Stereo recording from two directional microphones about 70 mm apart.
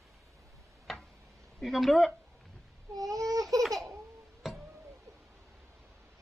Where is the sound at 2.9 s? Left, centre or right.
Right.